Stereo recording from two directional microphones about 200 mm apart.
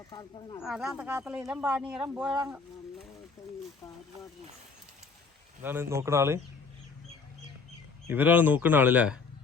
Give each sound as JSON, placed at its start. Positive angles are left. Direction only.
{"t": 0.1, "sound": "speech", "side_deg": 15}
{"t": 0.6, "sound": "speech", "side_deg": -5}
{"t": 5.6, "sound": "speech", "side_deg": -10}
{"t": 8.0, "sound": "speech", "side_deg": -10}